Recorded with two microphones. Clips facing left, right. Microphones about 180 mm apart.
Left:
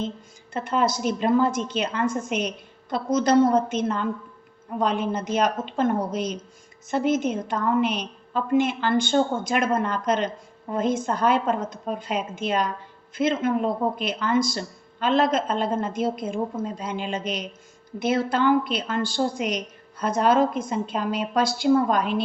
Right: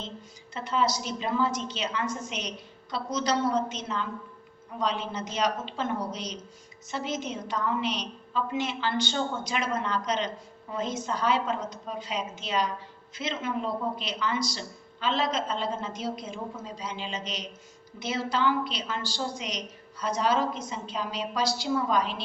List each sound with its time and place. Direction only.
0.5 s a woman's voice: 50° left (ahead or behind)